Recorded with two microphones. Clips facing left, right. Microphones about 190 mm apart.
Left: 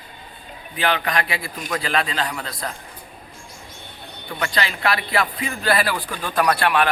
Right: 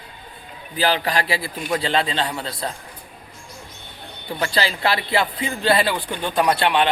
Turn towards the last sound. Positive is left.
turn(degrees=-25)  # may be behind; listen again after turning